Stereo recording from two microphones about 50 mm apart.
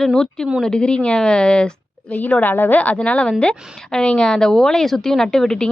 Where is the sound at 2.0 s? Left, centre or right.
Left.